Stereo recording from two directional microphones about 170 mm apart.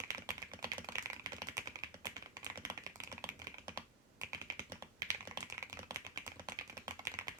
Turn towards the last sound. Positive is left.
turn(degrees=-20)  # may be behind; listen again after turning